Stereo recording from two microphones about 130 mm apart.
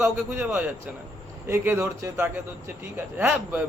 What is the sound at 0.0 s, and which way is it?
Speech, 10° right (ahead or behind).